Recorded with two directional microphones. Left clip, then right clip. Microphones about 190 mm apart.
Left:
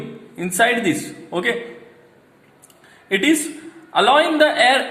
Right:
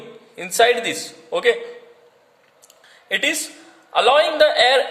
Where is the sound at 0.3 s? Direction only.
50° right (ahead or behind).